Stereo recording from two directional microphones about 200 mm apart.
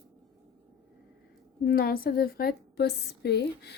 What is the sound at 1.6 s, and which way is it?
A woman's voice, 50° left (ahead or behind).